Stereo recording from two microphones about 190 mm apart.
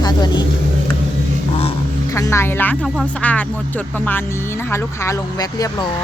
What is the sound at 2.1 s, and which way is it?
Music, 15° left (ahead or behind).